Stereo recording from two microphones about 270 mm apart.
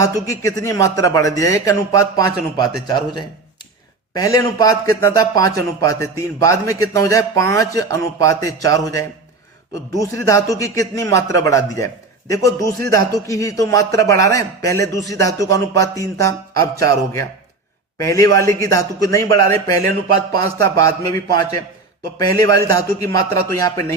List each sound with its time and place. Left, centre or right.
0.0 s a man's voice: centre
22.4 s a man's voice: centre